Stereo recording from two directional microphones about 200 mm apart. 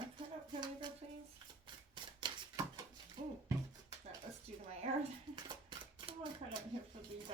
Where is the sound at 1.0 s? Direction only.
30° right (ahead or behind).